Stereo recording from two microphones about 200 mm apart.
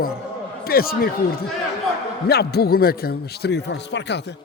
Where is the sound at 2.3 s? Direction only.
55° left (ahead or behind).